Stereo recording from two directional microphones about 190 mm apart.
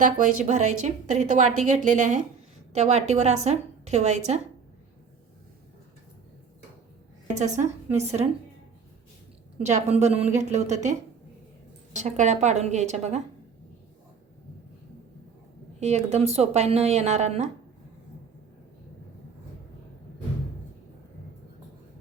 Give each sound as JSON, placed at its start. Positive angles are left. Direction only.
{"t": 0.0, "sound": "a woman's voice", "side_deg": -40}
{"t": 7.3, "sound": "a woman's voice", "side_deg": -40}
{"t": 9.6, "sound": "a woman's voice", "side_deg": -35}
{"t": 11.9, "sound": "a woman's voice", "side_deg": -40}
{"t": 15.8, "sound": "a woman's voice", "side_deg": -35}